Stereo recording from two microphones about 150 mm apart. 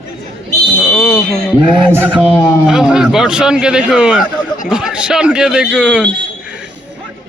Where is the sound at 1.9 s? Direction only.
15° right (ahead or behind).